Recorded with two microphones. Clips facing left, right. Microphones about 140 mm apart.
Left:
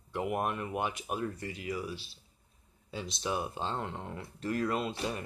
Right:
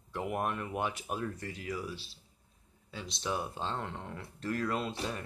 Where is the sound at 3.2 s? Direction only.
10° left (ahead or behind).